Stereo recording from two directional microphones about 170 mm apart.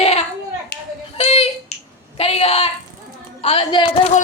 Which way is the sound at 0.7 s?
75° left (ahead or behind).